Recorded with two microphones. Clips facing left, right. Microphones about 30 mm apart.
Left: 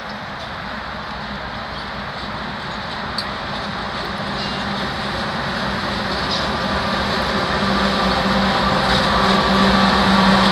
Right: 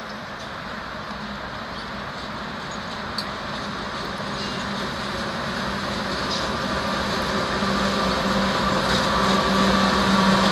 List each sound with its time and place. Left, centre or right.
4.6 s vehicle: left